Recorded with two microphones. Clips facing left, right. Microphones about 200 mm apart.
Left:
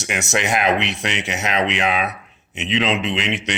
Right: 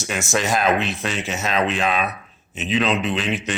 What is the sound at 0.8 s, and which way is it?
Speech, 75° left (ahead or behind).